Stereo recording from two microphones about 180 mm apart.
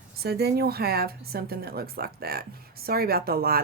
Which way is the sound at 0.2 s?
60° right (ahead or behind).